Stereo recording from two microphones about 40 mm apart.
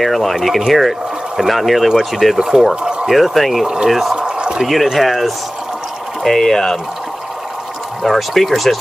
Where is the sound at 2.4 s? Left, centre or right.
Centre.